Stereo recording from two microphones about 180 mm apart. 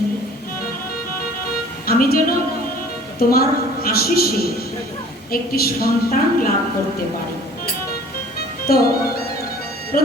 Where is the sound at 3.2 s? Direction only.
55° left (ahead or behind).